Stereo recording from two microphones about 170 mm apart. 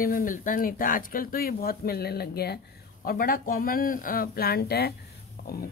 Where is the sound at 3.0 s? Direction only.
55° left (ahead or behind).